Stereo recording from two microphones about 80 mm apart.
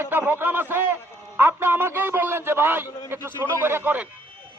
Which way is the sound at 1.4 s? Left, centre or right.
Right.